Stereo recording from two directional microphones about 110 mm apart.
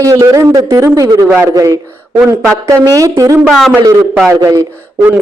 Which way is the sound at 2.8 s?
35° right (ahead or behind).